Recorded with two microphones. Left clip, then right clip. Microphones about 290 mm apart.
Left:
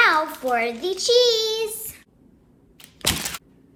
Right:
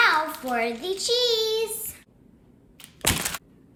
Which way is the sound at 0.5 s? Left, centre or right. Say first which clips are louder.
Left 2 dB; left.